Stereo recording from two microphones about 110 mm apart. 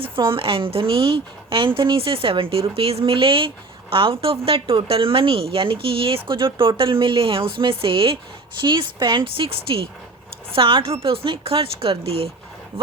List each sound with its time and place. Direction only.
0.0 s a woman's voice: 50° right (ahead or behind)